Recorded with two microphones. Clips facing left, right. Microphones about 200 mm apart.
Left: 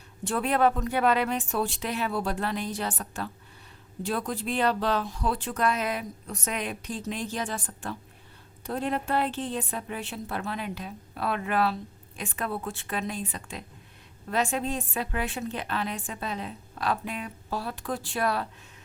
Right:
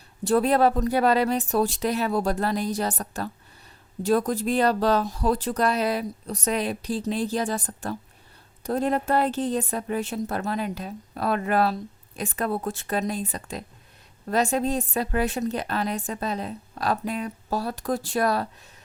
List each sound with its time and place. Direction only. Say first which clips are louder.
0.3 s a woman's voice: right 5 dB; 35° right (ahead or behind)